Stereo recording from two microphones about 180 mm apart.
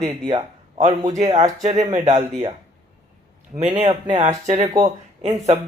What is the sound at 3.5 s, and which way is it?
Speech, 40° right (ahead or behind).